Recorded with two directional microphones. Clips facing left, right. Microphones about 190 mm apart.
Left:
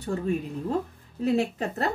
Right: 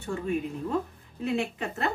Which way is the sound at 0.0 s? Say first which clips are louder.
Left 2 dB; 35° left (ahead or behind).